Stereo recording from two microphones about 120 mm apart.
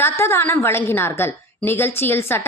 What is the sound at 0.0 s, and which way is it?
A woman's voice, 20° left (ahead or behind).